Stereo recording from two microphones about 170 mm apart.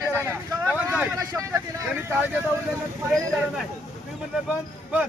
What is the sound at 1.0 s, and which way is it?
Vehicle, 20° right (ahead or behind).